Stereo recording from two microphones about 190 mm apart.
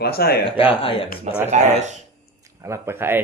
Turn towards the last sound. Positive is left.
turn(degrees=-10)  # may be behind; listen again after turning